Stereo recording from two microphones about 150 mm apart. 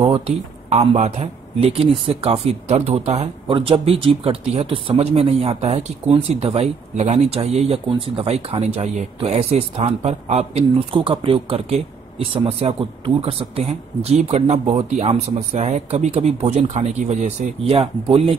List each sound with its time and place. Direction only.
0.7 s speech: 50° right (ahead or behind)
17.7 s speech: 35° right (ahead or behind)